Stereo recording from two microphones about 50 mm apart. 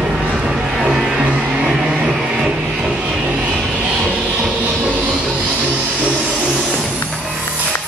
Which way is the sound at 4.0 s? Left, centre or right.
Right.